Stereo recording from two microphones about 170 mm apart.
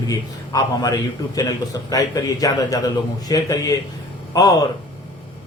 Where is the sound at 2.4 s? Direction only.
20° left (ahead or behind).